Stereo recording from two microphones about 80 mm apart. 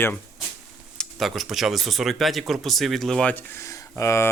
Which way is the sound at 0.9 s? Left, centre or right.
Centre.